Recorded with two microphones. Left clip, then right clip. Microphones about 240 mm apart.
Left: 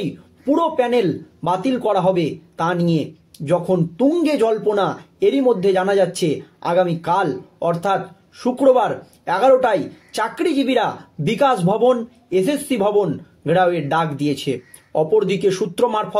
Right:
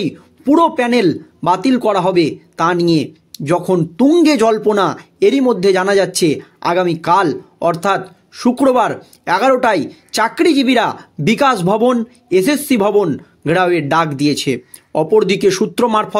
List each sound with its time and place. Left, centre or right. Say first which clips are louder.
0.0 s a man's voice: right 5 dB; right